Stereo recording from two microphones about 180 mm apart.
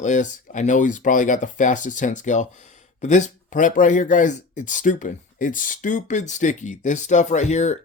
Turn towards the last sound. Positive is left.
turn(degrees=40)  # may be behind; listen again after turning